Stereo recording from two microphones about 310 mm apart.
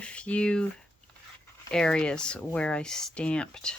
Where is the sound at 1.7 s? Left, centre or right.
Centre.